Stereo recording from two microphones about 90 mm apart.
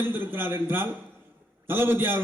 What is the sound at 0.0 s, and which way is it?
A man's voice, 25° right (ahead or behind).